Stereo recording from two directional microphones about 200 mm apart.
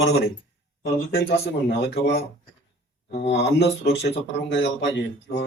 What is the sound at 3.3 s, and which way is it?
A man's voice, 60° left (ahead or behind).